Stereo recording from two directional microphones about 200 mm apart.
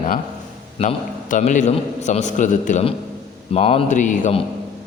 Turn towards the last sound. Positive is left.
turn(degrees=35)  # may be behind; listen again after turning